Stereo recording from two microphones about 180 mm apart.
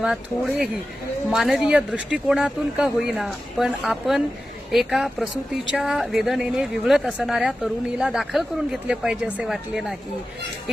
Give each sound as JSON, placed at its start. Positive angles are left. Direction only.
{"t": 0.0, "sound": "speech", "side_deg": 0}